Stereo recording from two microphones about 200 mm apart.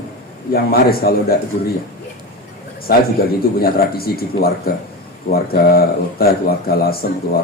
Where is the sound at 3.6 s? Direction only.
50° left (ahead or behind).